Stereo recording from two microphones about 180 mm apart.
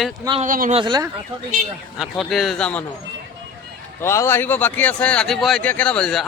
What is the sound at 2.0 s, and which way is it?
Speech, centre (ahead or behind).